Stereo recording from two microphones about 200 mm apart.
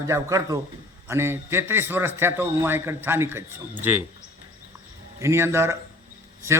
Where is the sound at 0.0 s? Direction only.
15° right (ahead or behind).